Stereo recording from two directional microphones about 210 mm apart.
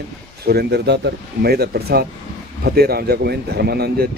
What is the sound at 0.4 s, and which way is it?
Speech, 50° right (ahead or behind).